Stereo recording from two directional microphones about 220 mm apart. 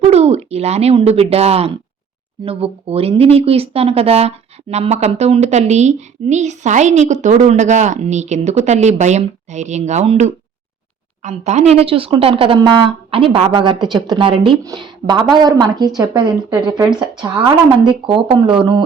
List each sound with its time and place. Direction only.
0.0 s speech: 30° right (ahead or behind)
16.8 s speech: 5° right (ahead or behind)
17.2 s speech: 20° right (ahead or behind)